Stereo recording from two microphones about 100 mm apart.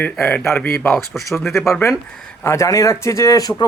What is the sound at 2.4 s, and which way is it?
A man's voice, 30° left (ahead or behind).